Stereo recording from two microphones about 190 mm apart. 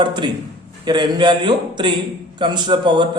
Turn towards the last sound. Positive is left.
turn(degrees=-25)  # may be behind; listen again after turning